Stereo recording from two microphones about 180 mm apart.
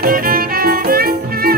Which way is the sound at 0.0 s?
55° right (ahead or behind).